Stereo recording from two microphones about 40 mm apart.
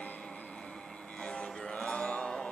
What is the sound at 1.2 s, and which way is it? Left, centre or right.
Music, left.